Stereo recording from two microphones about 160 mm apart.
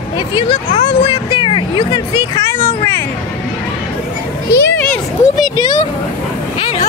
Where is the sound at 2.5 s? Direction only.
15° left (ahead or behind).